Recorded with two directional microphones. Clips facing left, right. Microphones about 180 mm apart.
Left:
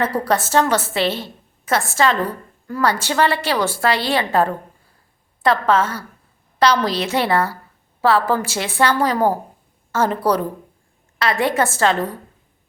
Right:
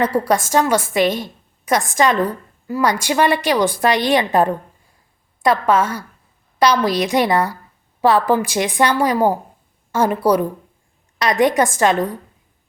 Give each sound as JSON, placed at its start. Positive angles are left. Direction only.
{"t": 0.0, "sound": "a woman's voice", "side_deg": -10}